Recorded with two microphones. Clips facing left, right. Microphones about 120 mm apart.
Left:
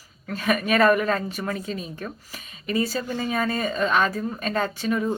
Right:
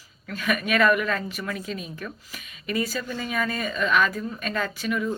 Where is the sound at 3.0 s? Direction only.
45° left (ahead or behind).